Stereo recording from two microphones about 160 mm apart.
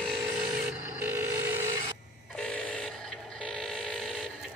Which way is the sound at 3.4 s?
5° left (ahead or behind).